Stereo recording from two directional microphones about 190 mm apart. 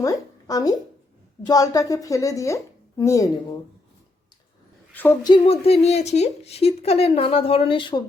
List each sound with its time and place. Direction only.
0.0 s a sound: 20° left (ahead or behind)
1.5 s a woman's voice: 20° left (ahead or behind)
4.9 s a woman's voice: 10° left (ahead or behind)
5.3 s speech: 30° left (ahead or behind)